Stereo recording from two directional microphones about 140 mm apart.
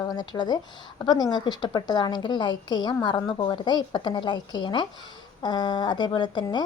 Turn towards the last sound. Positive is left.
turn(degrees=30)  # may be behind; listen again after turning